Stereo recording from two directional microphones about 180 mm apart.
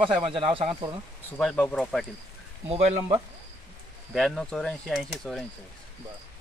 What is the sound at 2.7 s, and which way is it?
Speech, 35° right (ahead or behind).